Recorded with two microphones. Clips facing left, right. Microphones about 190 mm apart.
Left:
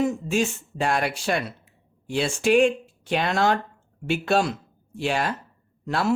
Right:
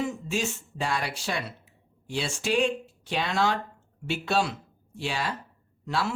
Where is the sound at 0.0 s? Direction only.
50° left (ahead or behind).